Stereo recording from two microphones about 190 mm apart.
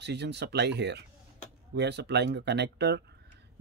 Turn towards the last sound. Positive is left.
turn(degrees=-60)  # may be behind; listen again after turning